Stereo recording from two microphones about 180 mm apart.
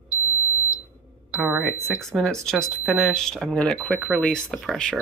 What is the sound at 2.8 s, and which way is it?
Speech, 10° right (ahead or behind).